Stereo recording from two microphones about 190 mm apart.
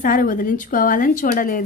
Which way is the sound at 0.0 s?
45° left (ahead or behind).